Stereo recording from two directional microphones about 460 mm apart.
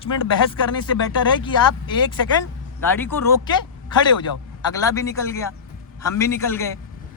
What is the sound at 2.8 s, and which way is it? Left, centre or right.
Speech, centre.